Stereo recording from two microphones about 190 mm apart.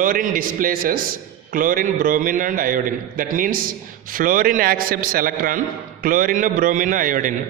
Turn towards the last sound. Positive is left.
turn(degrees=-45)  # may be behind; listen again after turning